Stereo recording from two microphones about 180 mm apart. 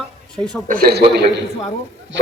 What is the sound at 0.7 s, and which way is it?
Speech, 55° right (ahead or behind).